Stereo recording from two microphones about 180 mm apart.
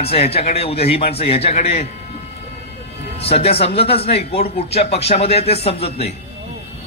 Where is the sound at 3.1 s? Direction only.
35° left (ahead or behind).